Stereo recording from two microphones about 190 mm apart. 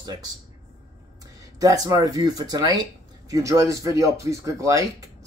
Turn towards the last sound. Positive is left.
turn(degrees=-15)  # may be behind; listen again after turning